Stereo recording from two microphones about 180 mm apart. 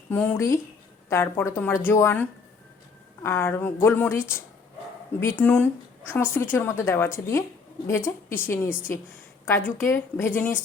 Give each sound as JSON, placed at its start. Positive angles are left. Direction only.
{"t": 0.1, "sound": "a woman's voice", "side_deg": 15}
{"t": 3.2, "sound": "a woman's voice", "side_deg": 15}